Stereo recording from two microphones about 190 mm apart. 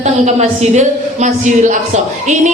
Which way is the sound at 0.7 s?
40° right (ahead or behind).